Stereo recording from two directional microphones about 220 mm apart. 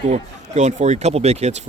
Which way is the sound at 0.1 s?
30° right (ahead or behind).